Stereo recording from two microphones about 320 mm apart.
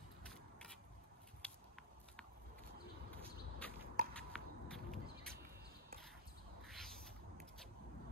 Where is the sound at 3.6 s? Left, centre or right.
Centre.